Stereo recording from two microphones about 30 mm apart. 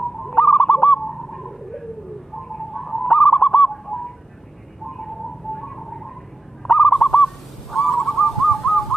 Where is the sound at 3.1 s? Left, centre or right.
Centre.